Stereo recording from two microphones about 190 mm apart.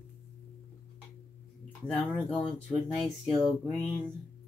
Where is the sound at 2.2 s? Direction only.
5° left (ahead or behind).